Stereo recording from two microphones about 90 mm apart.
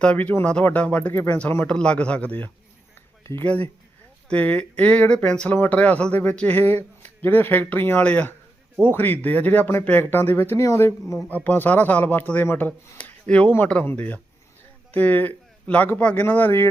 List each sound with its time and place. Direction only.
0.0 s speech: 15° left (ahead or behind)